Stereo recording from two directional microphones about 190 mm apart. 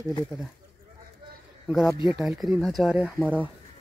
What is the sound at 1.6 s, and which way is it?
Speech, centre (ahead or behind).